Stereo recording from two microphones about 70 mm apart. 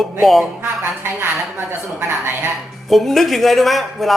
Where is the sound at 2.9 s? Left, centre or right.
Centre.